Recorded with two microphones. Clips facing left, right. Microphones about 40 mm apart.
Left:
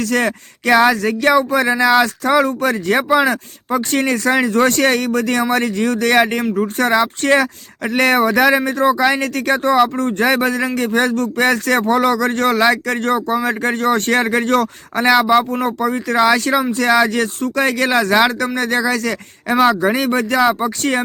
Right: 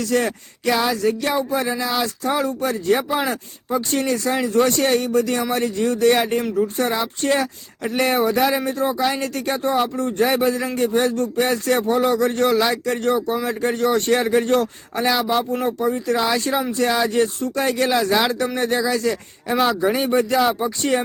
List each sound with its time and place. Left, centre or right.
0.1 s speech: left
1.2 s speech: left
5.4 s speech: left
12.7 s speech: left
14.9 s speech: left
15.3 s speech: left
15.8 s speech: left
20.5 s speech: left